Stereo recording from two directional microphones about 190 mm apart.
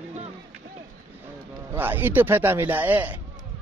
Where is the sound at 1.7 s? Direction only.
10° right (ahead or behind).